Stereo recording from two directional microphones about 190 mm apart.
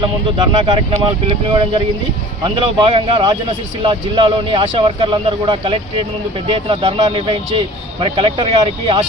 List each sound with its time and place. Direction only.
0.3 s speech: 25° right (ahead or behind)